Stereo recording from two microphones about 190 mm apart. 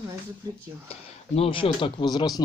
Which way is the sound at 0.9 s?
30° left (ahead or behind).